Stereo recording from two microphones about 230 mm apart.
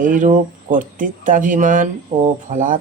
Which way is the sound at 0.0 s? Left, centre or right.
Right.